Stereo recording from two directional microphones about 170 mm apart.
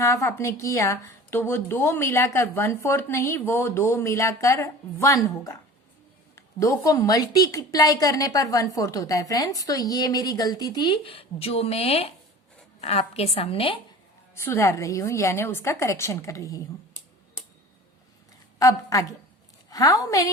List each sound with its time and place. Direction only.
0.0 s a woman's voice: 20° left (ahead or behind); by 13.7 s 35° left (ahead or behind)
14.3 s a woman's voice: 15° left (ahead or behind)
18.6 s a woman's voice: 20° left (ahead or behind)